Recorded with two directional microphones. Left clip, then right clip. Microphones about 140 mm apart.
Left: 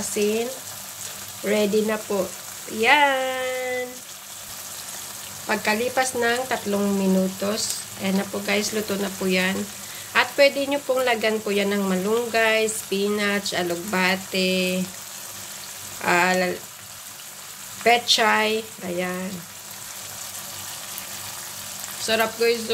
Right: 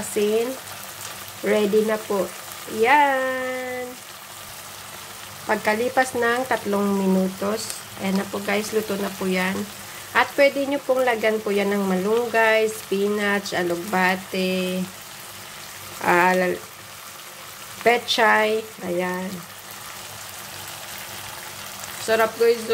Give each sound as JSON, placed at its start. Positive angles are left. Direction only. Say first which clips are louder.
{"t": 0.2, "sound": "frying", "louder": "right 1 dB", "side_deg": -25}
{"t": 1.4, "sound": "frying", "louder": "right 2 dB", "side_deg": -25}
{"t": 2.8, "sound": "speech", "louder": "right 1 dB", "side_deg": -10}
{"t": 5.5, "sound": "frying", "louder": "right 1 dB", "side_deg": -20}
{"t": 16.0, "sound": "frying", "louder": "right 2 dB", "side_deg": -20}
{"t": 17.8, "sound": "frying", "louder": "even", "side_deg": -25}
{"t": 22.0, "sound": "frying", "louder": "right 3 dB", "side_deg": -30}